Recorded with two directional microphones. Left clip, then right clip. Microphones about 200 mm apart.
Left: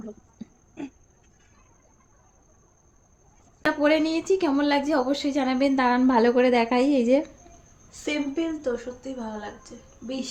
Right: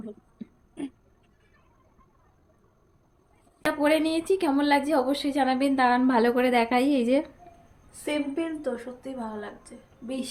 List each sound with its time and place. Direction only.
3.6 s a woman's voice: centre (ahead or behind)
7.9 s a woman's voice: 25° left (ahead or behind)